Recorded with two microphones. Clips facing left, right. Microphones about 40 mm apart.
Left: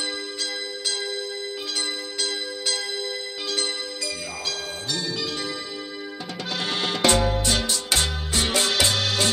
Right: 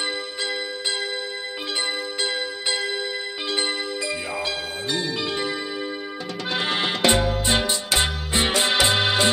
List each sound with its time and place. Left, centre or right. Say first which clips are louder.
2.2 s music: right 1 dB; right
6.5 s music: right 3 dB; right